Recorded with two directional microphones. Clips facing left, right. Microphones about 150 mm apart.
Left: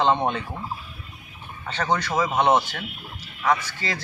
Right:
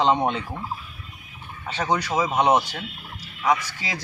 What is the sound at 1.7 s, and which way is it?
Speech, 10° right (ahead or behind).